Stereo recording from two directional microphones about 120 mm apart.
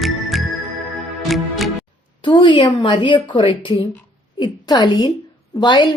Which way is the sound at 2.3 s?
40° left (ahead or behind).